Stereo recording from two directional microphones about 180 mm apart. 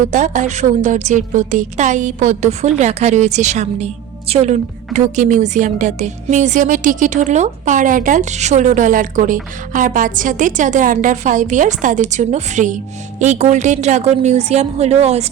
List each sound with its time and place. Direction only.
0.1 s a woman's voice: 45° right (ahead or behind)